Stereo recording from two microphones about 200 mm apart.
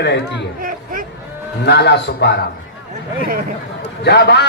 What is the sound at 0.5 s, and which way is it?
Speech, 45° right (ahead or behind).